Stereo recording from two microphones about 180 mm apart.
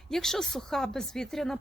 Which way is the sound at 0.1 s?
5° left (ahead or behind).